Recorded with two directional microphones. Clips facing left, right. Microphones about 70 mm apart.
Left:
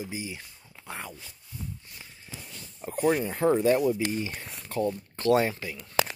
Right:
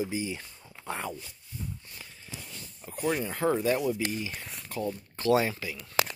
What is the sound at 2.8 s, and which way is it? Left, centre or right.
Speech, left.